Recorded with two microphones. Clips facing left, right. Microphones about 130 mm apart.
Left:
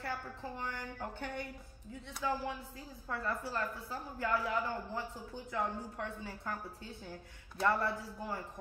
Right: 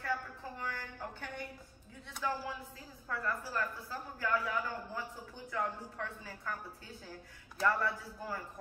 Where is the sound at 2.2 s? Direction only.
20° left (ahead or behind).